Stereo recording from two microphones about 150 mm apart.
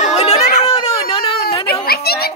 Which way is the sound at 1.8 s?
90° left.